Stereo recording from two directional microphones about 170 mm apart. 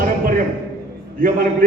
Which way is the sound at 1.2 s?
50° right (ahead or behind).